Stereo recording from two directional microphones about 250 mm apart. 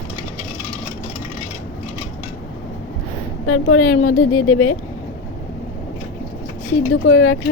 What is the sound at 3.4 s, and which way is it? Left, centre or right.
A woman's voice, left.